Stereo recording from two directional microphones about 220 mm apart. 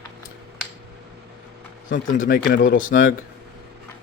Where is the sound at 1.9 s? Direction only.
35° left (ahead or behind).